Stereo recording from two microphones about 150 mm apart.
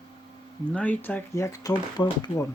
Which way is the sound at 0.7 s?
10° left (ahead or behind).